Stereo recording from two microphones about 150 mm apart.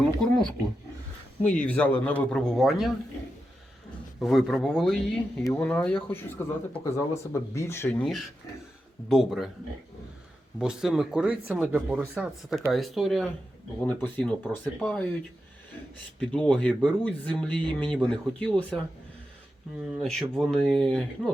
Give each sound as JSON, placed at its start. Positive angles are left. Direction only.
{"t": 0.2, "sound": "speech", "side_deg": 5}
{"t": 4.2, "sound": "speech", "side_deg": 0}
{"t": 9.0, "sound": "speech", "side_deg": 0}
{"t": 10.6, "sound": "speech", "side_deg": -5}
{"t": 13.8, "sound": "speech", "side_deg": 10}
{"t": 16.2, "sound": "speech", "side_deg": 5}
{"t": 19.8, "sound": "speech", "side_deg": 0}